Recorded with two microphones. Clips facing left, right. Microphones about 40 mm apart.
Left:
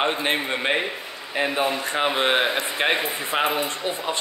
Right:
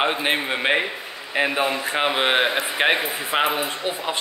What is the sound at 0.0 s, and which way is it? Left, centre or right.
Speech, centre.